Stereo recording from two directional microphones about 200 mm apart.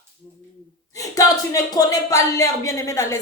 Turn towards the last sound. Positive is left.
turn(degrees=15)  # may be behind; listen again after turning